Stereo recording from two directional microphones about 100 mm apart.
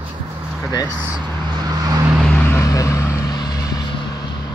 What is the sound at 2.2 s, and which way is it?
Vehicle, 10° left (ahead or behind).